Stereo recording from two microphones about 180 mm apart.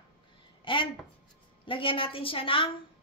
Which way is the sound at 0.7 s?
30° left (ahead or behind).